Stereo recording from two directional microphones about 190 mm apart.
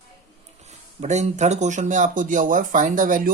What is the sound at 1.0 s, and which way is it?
Speech, 35° right (ahead or behind).